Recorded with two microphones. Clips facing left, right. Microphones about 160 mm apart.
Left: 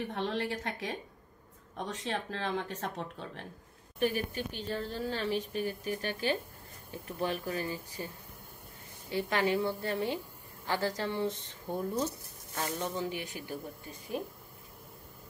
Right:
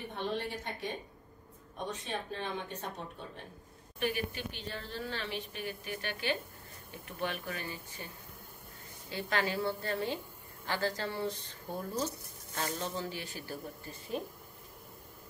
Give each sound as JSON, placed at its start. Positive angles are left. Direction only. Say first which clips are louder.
{"t": 0.1, "sound": "speech", "louder": "left 3 dB", "side_deg": 90}
{"t": 4.0, "sound": "a woman's voice", "louder": "left 3 dB", "side_deg": 45}
{"t": 9.1, "sound": "speech", "louder": "left 4 dB", "side_deg": 20}